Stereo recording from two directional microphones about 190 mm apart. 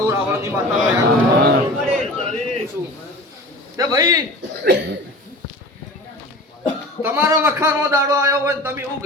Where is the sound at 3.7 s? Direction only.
20° right (ahead or behind).